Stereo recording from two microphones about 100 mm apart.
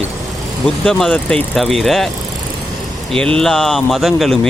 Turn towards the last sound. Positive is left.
turn(degrees=0)  # may be behind; listen again after turning